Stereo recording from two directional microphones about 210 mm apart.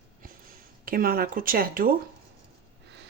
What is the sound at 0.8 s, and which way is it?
Speech, 45° right (ahead or behind).